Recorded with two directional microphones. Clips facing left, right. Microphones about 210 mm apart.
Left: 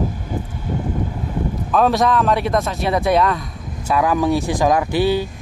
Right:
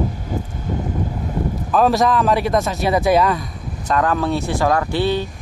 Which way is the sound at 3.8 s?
10° left (ahead or behind).